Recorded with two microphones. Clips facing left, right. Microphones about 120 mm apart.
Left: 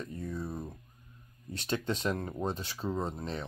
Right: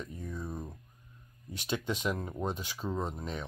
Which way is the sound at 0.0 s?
10° right (ahead or behind).